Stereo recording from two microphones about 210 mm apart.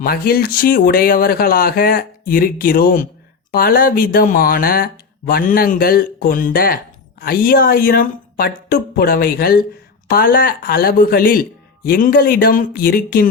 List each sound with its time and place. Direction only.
0.0 s speech: 45° left (ahead or behind)